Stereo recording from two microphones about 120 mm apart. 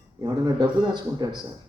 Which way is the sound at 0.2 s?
30° right (ahead or behind).